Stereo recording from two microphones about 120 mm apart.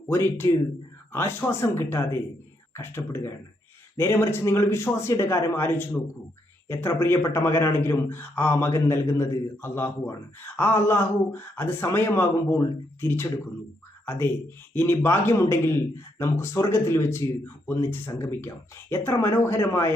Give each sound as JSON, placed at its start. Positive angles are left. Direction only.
{"t": 0.1, "sound": "speech", "side_deg": 20}